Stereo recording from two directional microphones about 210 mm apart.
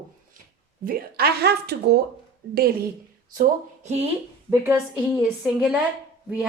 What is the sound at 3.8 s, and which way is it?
Speech, 30° right (ahead or behind).